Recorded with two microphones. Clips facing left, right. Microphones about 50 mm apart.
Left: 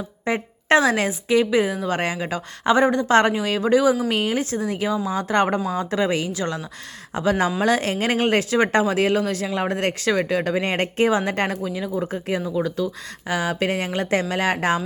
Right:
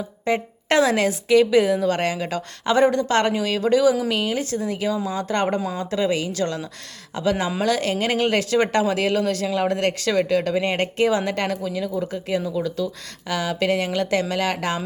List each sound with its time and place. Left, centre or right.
0.7 s a woman's voice: left
4.1 s a woman's voice: left
13.2 s a woman's voice: left